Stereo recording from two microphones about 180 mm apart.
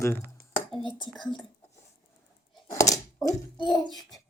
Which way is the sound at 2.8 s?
20° left (ahead or behind).